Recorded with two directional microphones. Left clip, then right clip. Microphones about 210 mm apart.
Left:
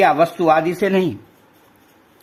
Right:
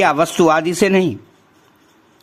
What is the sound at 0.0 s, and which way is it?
Speech, 30° right (ahead or behind).